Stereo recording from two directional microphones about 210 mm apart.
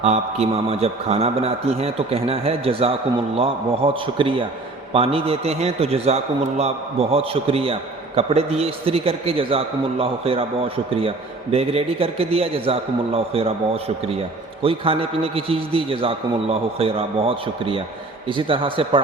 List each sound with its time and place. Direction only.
0.0 s a man's voice: 30° right (ahead or behind)